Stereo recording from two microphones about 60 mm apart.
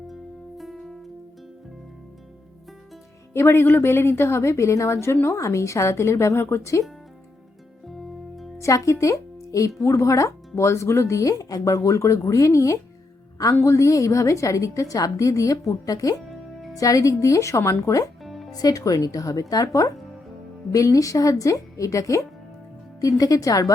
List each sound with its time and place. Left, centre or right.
0.1 s music: centre
3.3 s a woman's voice: left
7.9 s music: centre
8.5 s a woman's voice: left
18.2 s music: centre
18.5 s a woman's voice: left
20.7 s a woman's voice: left